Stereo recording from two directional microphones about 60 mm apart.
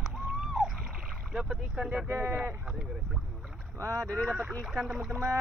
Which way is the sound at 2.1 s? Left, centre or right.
Right.